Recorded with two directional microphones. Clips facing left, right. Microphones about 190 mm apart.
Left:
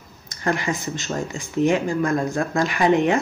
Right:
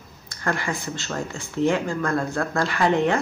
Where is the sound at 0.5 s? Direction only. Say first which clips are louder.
Left 3 dB; 20° left (ahead or behind).